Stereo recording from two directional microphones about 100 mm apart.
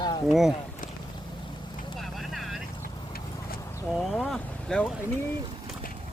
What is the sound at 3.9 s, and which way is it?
Speech, centre (ahead or behind).